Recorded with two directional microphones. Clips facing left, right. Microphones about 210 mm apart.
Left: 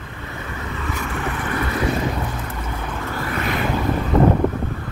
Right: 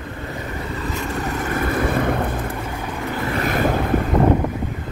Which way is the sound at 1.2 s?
45° right (ahead or behind).